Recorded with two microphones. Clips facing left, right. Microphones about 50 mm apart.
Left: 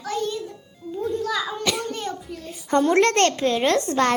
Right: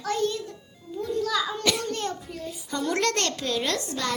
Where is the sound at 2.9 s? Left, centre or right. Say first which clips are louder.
Left 6 dB; left.